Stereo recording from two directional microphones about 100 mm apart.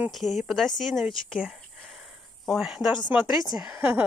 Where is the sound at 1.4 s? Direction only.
10° right (ahead or behind).